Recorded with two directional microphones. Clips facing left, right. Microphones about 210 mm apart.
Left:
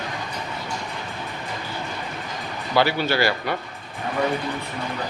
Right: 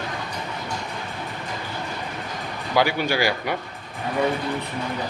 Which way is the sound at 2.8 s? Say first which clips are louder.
Left 1 dB; 15° right (ahead or behind).